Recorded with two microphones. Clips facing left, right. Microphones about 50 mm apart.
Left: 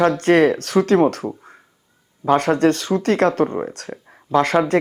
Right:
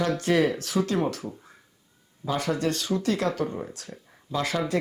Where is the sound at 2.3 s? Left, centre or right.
Left.